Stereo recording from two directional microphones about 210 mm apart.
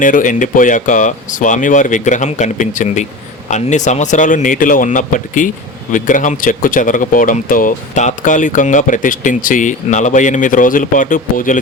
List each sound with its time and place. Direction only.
0.0 s speech: 40° left (ahead or behind)